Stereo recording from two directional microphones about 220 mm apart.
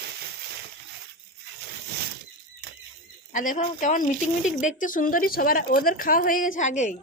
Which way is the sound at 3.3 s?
35° left (ahead or behind).